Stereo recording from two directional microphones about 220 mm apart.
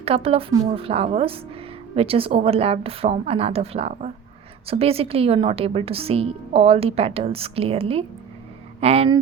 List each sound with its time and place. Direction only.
0.0 s a woman's voice: 25° right (ahead or behind)